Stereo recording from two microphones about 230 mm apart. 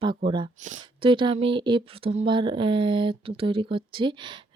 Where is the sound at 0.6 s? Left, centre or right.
Right.